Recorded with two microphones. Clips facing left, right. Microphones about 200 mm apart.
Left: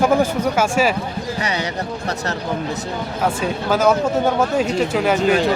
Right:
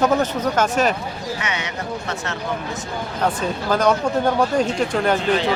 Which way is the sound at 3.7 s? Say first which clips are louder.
Left 2 dB; 5° left (ahead or behind).